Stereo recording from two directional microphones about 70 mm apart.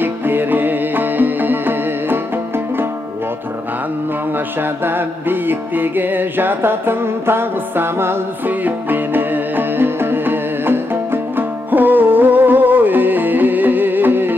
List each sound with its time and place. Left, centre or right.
0.0 s music: right
4.6 s music: right